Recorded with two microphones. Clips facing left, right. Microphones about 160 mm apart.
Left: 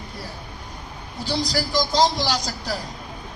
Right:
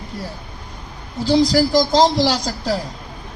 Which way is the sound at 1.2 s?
90° right.